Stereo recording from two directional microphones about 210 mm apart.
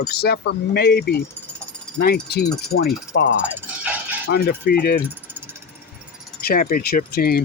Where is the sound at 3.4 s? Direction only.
10° right (ahead or behind).